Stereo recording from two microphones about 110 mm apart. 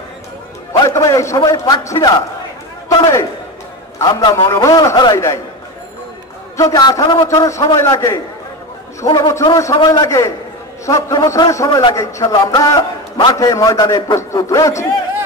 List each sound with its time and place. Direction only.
0.8 s a man's voice: 30° left (ahead or behind); by 4.5 s 45° left (ahead or behind)
4.5 s a man's voice: 30° left (ahead or behind)
5.1 s a man's voice: 25° left (ahead or behind)
6.5 s a man's voice: 30° left (ahead or behind)
7.4 s a man's voice: 30° left (ahead or behind)
12.4 s a man's voice: 40° left (ahead or behind)